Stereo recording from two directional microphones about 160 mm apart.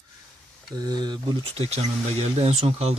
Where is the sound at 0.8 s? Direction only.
25° right (ahead or behind).